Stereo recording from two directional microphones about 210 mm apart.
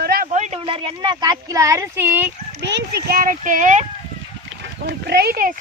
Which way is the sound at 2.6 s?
55° right (ahead or behind).